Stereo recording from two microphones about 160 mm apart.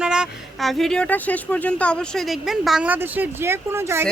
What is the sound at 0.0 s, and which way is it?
Speech, 5° right (ahead or behind).